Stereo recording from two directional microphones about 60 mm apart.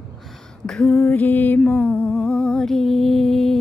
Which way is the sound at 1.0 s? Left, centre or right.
Left.